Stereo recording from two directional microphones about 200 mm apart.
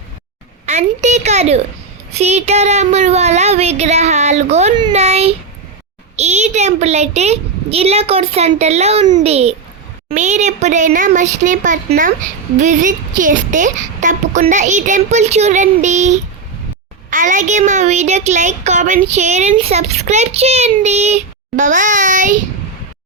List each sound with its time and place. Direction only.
0.6 s a woman's voice: 35° right (ahead or behind)